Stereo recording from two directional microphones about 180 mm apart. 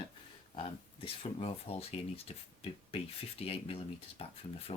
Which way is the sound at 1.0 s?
30° left (ahead or behind).